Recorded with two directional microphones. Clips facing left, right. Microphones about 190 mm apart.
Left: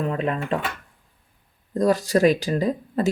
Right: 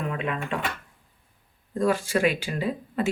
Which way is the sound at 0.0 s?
35° left (ahead or behind).